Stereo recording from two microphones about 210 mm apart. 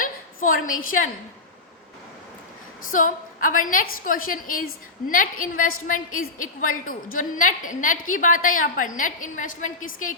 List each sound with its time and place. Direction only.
0.0 s a sound: 40° left (ahead or behind)
0.9 s a woman's voice: 40° left (ahead or behind)
2.9 s a woman's voice: 40° left (ahead or behind)